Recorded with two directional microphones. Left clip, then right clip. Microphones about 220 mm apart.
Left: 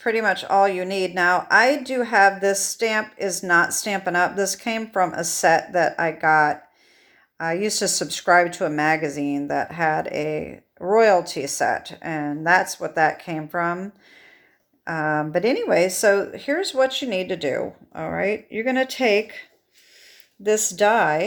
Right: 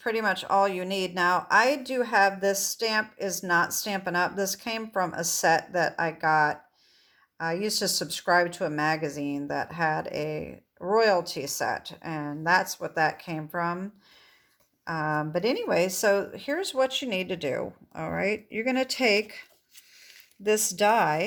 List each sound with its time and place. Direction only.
0.0 s a woman's voice: 20° right (ahead or behind)